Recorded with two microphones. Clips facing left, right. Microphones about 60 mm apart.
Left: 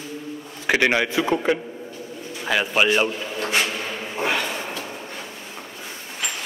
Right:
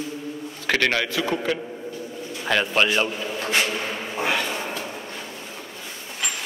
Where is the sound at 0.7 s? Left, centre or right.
Centre.